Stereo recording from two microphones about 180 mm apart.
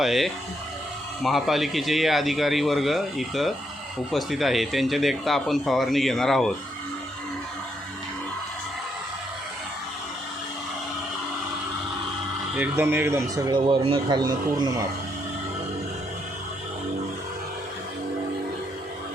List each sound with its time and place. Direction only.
0.0 s speech: centre (ahead or behind)
12.5 s speech: 10° right (ahead or behind)